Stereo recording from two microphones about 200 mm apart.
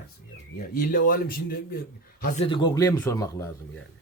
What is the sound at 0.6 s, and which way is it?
Speech, 45° left (ahead or behind).